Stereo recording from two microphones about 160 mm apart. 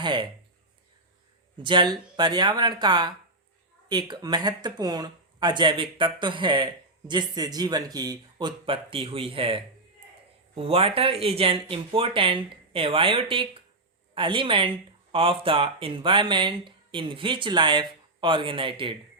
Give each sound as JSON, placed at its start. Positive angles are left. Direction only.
{"t": 0.0, "sound": "speech", "side_deg": -30}
{"t": 1.5, "sound": "speech", "side_deg": -30}